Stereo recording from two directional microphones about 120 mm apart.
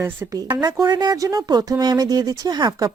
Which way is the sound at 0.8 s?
35° right (ahead or behind).